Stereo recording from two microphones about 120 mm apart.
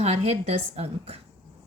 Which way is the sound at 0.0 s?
60° right (ahead or behind).